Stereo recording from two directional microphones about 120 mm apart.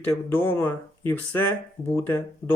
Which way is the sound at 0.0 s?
15° left (ahead or behind).